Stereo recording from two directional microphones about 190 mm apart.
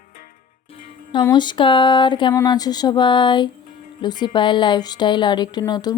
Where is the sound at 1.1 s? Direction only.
20° left (ahead or behind).